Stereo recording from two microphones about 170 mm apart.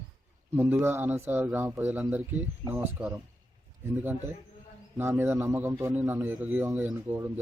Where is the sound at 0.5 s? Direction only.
15° right (ahead or behind).